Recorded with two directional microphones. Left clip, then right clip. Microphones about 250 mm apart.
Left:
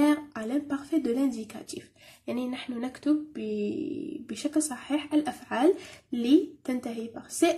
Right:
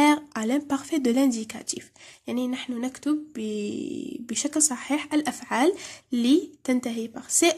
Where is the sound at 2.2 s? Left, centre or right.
Right.